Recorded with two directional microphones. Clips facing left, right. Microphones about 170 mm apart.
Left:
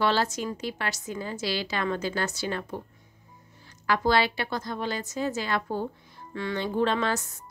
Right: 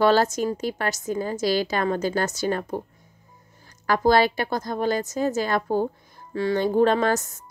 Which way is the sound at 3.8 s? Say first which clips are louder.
Right 5 dB; 45° right (ahead or behind).